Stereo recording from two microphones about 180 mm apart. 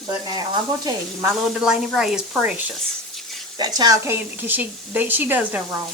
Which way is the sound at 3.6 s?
20° right (ahead or behind).